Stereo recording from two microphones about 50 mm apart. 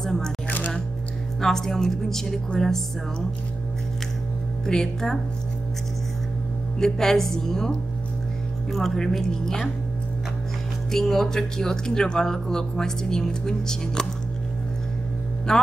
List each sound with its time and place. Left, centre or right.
0.0 s single-lens reflex camera: centre
0.5 s music: left
1.4 s speech: centre
4.6 s speech: centre
6.8 s speech: centre
8.7 s speech: centre
10.9 s speech: centre
15.5 s speech: centre